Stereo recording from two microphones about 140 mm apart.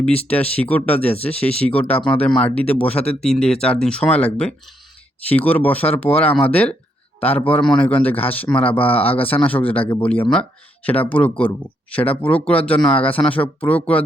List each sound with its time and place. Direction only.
0.3 s speech: 10° left (ahead or behind)